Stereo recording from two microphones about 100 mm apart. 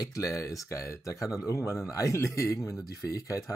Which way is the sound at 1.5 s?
30° left (ahead or behind).